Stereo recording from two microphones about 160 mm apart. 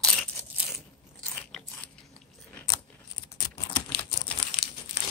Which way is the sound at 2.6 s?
25° left (ahead or behind).